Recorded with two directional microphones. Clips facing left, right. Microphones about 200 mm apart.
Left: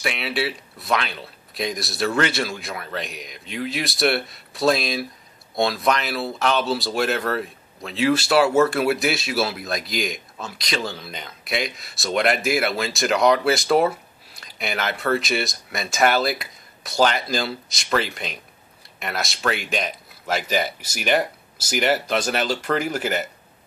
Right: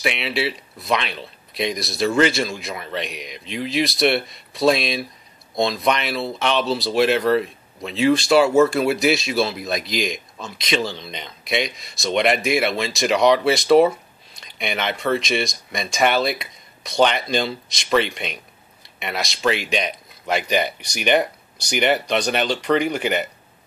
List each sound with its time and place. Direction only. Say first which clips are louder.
0.0 s speech: right 2 dB; centre (ahead or behind)